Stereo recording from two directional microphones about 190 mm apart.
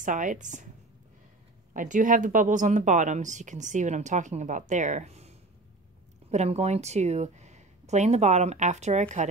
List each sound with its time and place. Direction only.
0.0 s a woman's voice: 45° right (ahead or behind)
1.7 s speech: 45° right (ahead or behind)
6.3 s speech: 35° right (ahead or behind)